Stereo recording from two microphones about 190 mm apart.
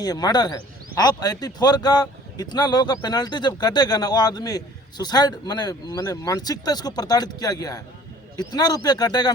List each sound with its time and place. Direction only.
0.0 s a man's voice: 20° left (ahead or behind)